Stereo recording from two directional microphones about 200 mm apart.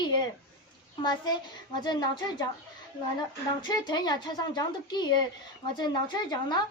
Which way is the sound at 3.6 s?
20° left (ahead or behind).